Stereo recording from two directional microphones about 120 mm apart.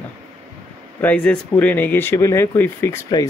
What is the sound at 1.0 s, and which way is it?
Speech, 15° left (ahead or behind).